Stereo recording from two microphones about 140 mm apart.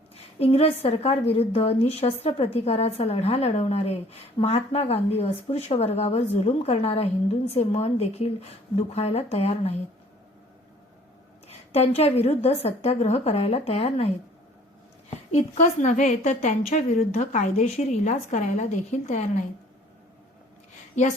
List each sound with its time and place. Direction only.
0.3 s speech: 45° left (ahead or behind)
11.4 s speech: 45° left (ahead or behind)
15.3 s a woman's voice: 50° left (ahead or behind)